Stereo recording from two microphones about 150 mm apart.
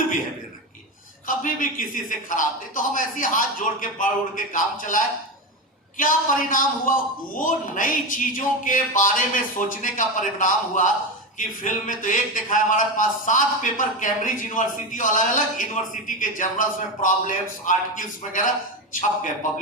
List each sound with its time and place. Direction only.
1.4 s speech: 65° left (ahead or behind)